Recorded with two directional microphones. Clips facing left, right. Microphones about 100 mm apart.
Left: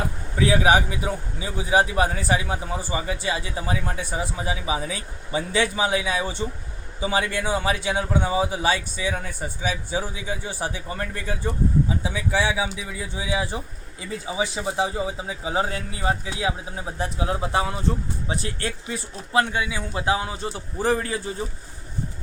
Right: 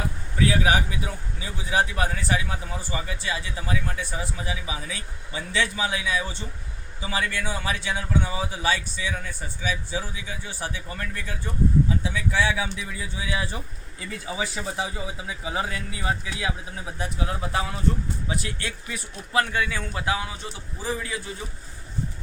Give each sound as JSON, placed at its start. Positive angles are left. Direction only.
{"t": 0.3, "sound": "speech", "side_deg": 25}
{"t": 14.8, "sound": "speech", "side_deg": 30}
{"t": 20.7, "sound": "a man's voice", "side_deg": 55}
{"t": 21.1, "sound": "speech", "side_deg": 35}